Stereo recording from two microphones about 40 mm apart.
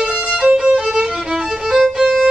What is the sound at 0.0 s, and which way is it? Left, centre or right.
Violin, right.